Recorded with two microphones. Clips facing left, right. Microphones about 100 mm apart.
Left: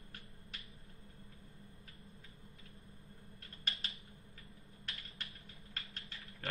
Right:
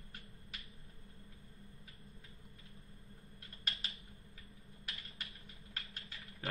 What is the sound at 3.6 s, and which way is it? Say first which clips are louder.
Typing: even; centre (ahead or behind).